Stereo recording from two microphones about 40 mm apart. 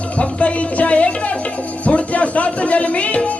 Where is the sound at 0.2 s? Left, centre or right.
Left.